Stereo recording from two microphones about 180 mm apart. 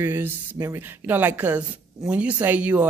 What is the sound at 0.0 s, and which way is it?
Speech, 10° right (ahead or behind).